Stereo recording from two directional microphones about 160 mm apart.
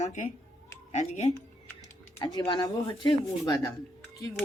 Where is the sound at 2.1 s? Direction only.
25° left (ahead or behind).